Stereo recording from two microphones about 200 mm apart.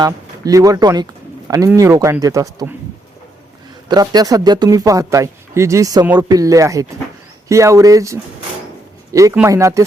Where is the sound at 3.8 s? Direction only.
20° right (ahead or behind).